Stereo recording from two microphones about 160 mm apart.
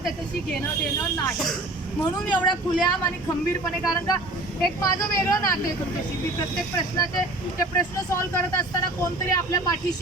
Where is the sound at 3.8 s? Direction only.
25° left (ahead or behind).